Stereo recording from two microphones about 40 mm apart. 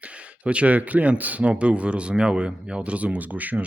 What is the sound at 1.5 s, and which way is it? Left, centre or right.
Speech, right.